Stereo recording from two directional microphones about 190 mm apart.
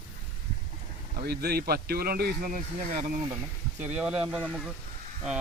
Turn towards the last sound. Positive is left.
turn(degrees=-5)  # may be behind; listen again after turning